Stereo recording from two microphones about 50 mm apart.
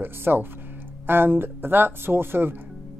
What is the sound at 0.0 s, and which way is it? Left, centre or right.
Speech, right.